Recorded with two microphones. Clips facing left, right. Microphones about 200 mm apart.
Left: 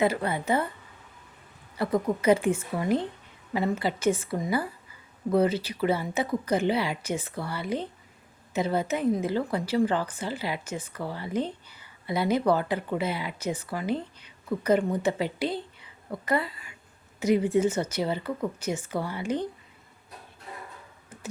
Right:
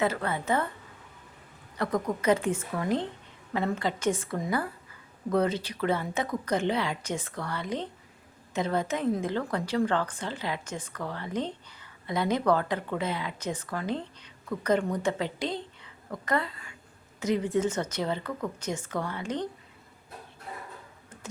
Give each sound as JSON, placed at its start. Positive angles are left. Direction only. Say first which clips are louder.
{"t": 0.0, "sound": "speech", "louder": "left 3 dB", "side_deg": 15}
{"t": 1.7, "sound": "speech", "louder": "left 3 dB", "side_deg": 5}